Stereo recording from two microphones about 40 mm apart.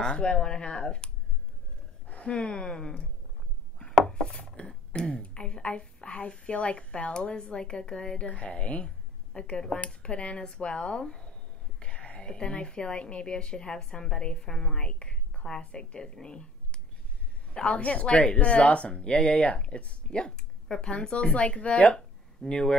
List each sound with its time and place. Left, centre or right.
0.0 s speech: left
2.0 s a sound: left
2.5 s speech: left
4.0 s chopping: left
4.4 s a sound: left
5.1 s a woman's voice: left
8.3 s speech: left; by 14.9 s centre
14.9 s a woman's voice: left
22.5 s speech: left